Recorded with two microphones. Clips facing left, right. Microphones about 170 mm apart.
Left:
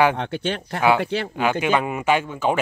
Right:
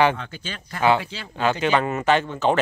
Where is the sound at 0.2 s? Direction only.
65° left (ahead or behind).